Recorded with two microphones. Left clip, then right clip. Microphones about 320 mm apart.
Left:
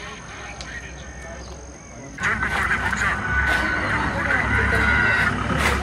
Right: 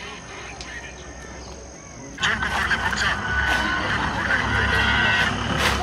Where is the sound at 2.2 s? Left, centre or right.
Centre.